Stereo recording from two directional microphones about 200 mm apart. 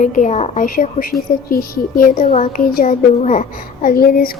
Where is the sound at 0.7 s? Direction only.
45° left (ahead or behind).